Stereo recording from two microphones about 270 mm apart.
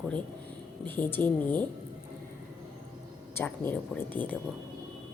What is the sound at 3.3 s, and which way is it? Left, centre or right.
Speech, centre.